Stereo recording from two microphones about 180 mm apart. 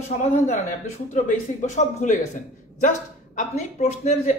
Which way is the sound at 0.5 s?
45° left (ahead or behind).